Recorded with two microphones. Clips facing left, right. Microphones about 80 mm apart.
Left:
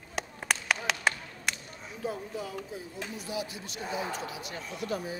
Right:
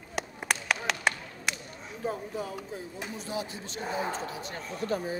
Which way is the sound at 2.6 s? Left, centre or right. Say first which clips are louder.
Right 1 dB; centre.